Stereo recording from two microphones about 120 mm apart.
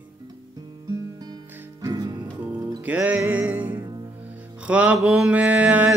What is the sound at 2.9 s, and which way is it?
Music, 15° right (ahead or behind).